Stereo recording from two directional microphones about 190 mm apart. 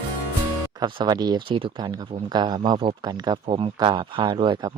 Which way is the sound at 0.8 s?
20° right (ahead or behind).